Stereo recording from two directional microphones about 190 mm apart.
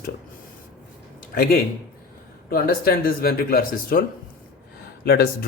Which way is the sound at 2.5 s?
50° left (ahead or behind).